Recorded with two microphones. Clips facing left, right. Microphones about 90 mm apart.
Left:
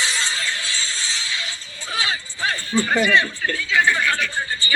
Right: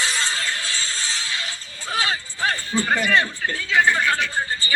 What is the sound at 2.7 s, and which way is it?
Speech, 20° right (ahead or behind).